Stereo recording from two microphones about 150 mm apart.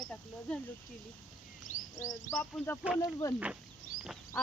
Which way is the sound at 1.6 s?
60° left (ahead or behind).